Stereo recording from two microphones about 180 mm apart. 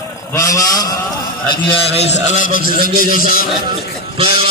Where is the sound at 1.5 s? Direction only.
35° left (ahead or behind); by 3.4 s 50° left (ahead or behind).